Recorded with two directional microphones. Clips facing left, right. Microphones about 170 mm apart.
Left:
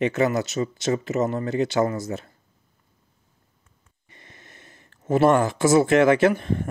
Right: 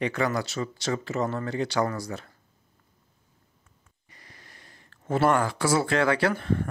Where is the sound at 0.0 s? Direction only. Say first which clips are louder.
Left 5 dB; 20° left (ahead or behind).